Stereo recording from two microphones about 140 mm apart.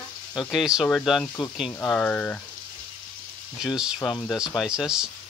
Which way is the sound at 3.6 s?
5° right (ahead or behind).